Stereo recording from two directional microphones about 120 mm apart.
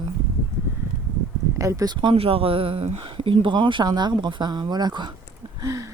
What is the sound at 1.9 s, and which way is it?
Speech, 50° right (ahead or behind).